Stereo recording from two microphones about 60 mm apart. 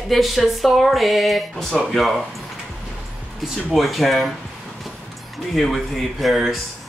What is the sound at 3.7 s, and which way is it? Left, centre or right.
Speech, centre.